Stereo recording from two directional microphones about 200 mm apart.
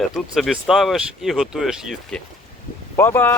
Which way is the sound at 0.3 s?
Centre (ahead or behind).